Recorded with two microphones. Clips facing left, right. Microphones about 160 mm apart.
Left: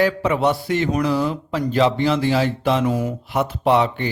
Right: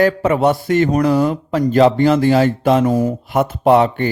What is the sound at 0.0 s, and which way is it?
A man's voice, 45° right (ahead or behind).